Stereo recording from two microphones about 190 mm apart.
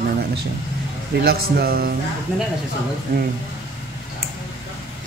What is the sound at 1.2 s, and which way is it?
Speech, 55° right (ahead or behind).